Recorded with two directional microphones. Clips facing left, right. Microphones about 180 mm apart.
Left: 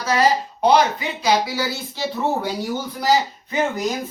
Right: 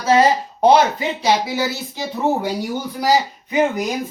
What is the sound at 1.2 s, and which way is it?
Speech, 25° right (ahead or behind).